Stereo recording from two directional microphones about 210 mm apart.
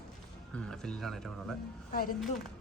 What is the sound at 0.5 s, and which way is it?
A man's voice, 5° left (ahead or behind).